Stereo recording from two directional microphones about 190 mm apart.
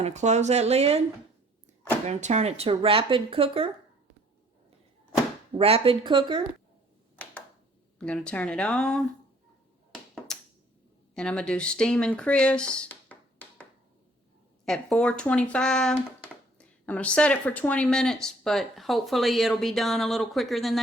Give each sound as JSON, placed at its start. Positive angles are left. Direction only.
{"t": 0.0, "sound": "speech", "side_deg": -35}
{"t": 2.0, "sound": "speech", "side_deg": -35}
{"t": 5.5, "sound": "speech", "side_deg": -30}
{"t": 7.9, "sound": "speech", "side_deg": 5}
{"t": 10.3, "sound": "a sound", "side_deg": 5}
{"t": 11.1, "sound": "speech", "side_deg": 5}